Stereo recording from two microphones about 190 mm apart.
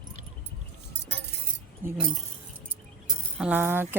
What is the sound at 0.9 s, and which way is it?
Chink, 60° right (ahead or behind).